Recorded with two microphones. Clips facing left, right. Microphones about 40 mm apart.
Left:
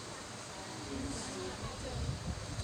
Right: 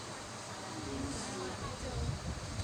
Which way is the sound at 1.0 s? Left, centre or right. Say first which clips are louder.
Even; right.